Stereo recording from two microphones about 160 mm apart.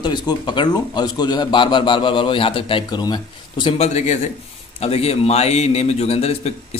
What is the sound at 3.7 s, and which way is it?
A man's voice, 45° left (ahead or behind).